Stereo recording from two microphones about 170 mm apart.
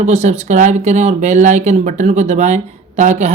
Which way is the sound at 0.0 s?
40° right (ahead or behind).